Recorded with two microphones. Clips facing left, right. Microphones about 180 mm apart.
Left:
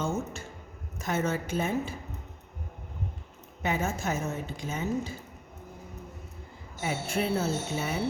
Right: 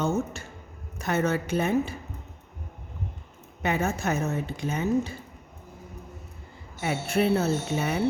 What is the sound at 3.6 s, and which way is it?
A woman's voice, 65° right (ahead or behind).